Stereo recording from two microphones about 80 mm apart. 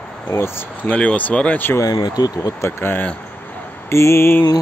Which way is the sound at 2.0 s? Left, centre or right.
Left.